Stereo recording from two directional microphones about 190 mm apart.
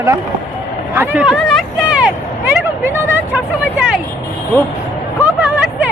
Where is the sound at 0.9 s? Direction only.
5° right (ahead or behind).